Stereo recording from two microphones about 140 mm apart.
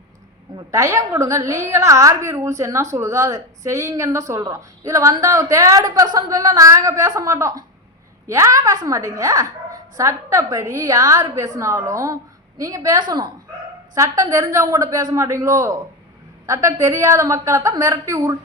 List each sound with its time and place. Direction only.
0.5 s a woman's voice: 20° right (ahead or behind)